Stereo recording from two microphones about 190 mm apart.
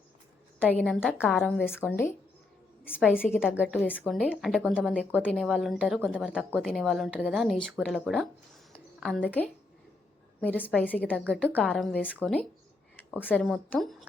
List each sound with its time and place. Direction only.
0.6 s a woman's voice: 5° left (ahead or behind)
2.9 s a woman's voice: 5° right (ahead or behind)
8.7 s a sound: centre (ahead or behind)
10.4 s a woman's voice: 10° left (ahead or behind)